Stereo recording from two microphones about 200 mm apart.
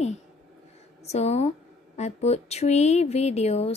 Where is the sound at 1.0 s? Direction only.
35° left (ahead or behind).